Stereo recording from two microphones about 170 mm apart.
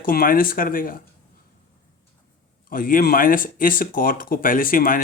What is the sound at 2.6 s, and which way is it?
Speech, 55° left (ahead or behind).